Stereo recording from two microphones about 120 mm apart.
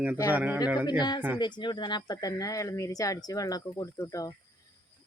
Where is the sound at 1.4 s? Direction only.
40° left (ahead or behind).